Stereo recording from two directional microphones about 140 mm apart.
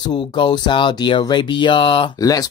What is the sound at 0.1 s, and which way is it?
Speech, 35° left (ahead or behind).